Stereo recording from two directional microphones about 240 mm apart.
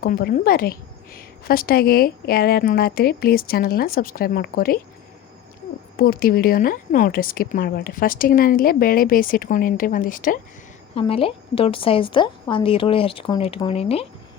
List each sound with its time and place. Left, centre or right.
0.0 s a woman's voice: left
6.0 s a woman's voice: left
10.9 s a woman's voice: left